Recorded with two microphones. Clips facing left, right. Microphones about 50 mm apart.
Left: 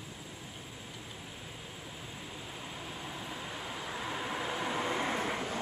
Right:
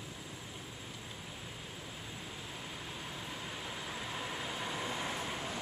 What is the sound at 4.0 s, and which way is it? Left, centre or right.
Vehicle, left.